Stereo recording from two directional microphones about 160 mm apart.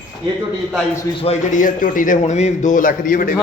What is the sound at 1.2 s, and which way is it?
A man's voice, 45° left (ahead or behind).